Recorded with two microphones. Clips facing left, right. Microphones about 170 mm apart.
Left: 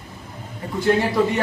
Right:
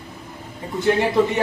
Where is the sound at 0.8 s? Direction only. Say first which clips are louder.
Right 1 dB; 20° right (ahead or behind).